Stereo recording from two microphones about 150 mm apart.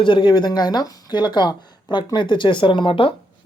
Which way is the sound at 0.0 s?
30° left (ahead or behind).